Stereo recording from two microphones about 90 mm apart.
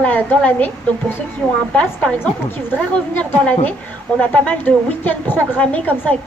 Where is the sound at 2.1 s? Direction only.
20° left (ahead or behind).